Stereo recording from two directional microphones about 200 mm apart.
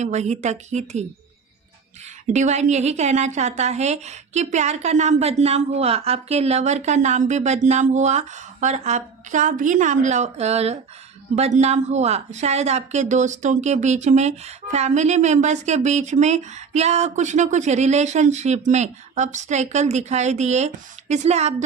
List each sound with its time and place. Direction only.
0.0 s speech: 35° right (ahead or behind)
2.3 s speech: 35° right (ahead or behind)